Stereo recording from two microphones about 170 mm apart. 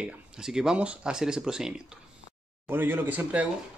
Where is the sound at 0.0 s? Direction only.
5° right (ahead or behind).